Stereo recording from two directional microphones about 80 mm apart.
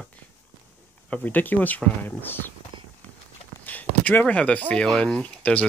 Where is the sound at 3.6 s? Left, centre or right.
Left.